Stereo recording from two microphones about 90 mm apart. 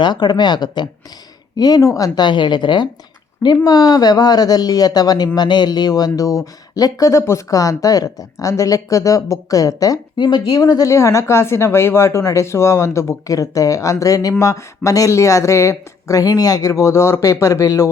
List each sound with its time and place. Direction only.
0.0 s speech: 55° left (ahead or behind); by 2.0 s 40° left (ahead or behind)
2.1 s speech: 60° left (ahead or behind)
3.6 s speech: 45° left (ahead or behind)
10.2 s speech: 50° left (ahead or behind)